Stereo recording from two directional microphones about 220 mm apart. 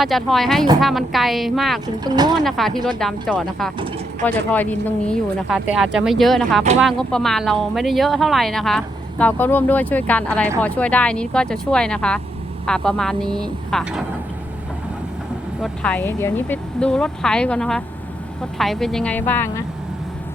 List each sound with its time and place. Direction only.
0.0 s speech: centre (ahead or behind)
2.0 s speech: 20° right (ahead or behind)
2.4 s speech: centre (ahead or behind)
15.6 s speech: 5° left (ahead or behind)